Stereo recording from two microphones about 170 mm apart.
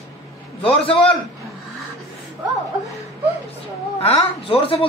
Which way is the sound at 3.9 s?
35° left (ahead or behind).